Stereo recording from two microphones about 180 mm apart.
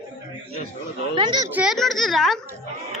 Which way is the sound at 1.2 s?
25° right (ahead or behind).